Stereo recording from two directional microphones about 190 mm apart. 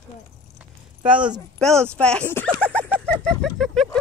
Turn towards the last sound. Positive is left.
turn(degrees=0)  # may be behind; listen again after turning